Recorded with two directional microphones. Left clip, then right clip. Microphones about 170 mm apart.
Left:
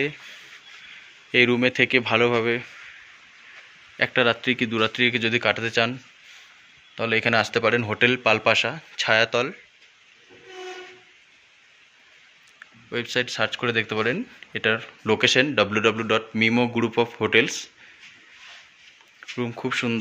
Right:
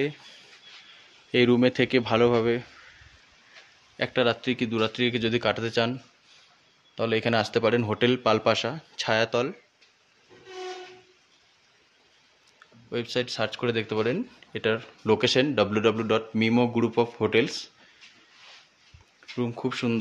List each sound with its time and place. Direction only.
0.0 s speech: 15° right (ahead or behind)
1.3 s a man's voice: 30° right (ahead or behind)
3.9 s speech: 5° right (ahead or behind)
7.0 s a man's voice: 15° right (ahead or behind)
12.9 s speech: 10° right (ahead or behind)
19.3 s speech: 10° right (ahead or behind)